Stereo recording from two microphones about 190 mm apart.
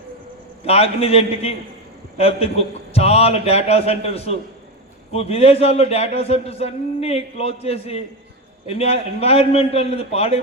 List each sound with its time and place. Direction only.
0.6 s a man's voice: 30° left (ahead or behind)